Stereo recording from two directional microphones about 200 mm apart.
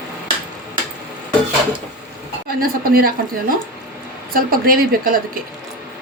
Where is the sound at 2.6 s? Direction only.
45° right (ahead or behind).